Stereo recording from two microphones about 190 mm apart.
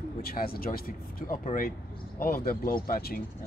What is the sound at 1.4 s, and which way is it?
Speech, 40° left (ahead or behind).